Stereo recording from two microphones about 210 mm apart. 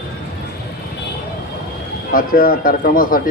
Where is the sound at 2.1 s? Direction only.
45° left (ahead or behind).